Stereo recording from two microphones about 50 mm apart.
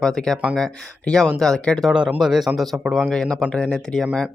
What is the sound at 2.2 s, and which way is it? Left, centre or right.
Speech, centre.